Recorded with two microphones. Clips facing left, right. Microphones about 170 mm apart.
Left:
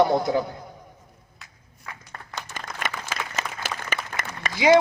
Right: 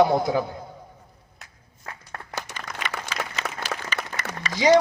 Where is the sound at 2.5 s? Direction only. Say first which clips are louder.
Left 1 dB; 45° left (ahead or behind).